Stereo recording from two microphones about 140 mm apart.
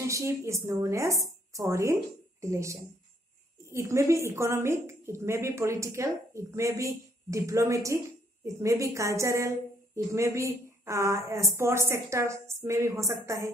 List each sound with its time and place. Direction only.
0.0 s a woman's voice: 20° right (ahead or behind)